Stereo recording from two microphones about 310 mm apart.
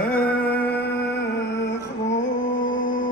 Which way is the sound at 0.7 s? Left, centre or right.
Left.